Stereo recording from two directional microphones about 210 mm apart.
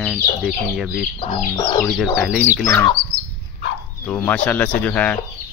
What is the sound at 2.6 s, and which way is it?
Speech, 10° left (ahead or behind).